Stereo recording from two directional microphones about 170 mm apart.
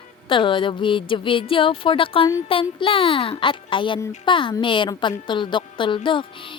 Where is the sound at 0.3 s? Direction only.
30° left (ahead or behind).